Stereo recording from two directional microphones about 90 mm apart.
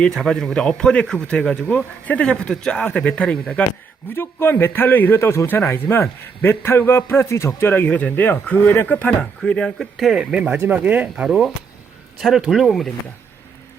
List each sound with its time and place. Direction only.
0.0 s speech: 5° left (ahead or behind)
4.1 s a man's voice: 25° left (ahead or behind); by 11.3 s 15° right (ahead or behind)
11.3 s speech: centre (ahead or behind)